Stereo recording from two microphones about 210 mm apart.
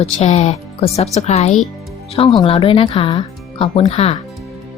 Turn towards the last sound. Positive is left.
turn(degrees=30)  # may be behind; listen again after turning